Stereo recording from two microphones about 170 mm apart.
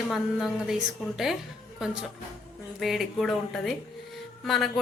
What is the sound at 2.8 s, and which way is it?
A woman's voice, centre (ahead or behind).